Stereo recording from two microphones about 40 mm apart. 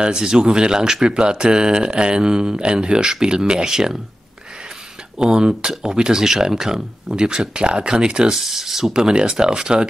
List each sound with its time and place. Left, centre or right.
0.0 s speech: centre
5.2 s speech: right
8.9 s speech: right